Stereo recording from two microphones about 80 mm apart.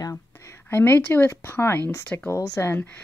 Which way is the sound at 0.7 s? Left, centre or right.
Left.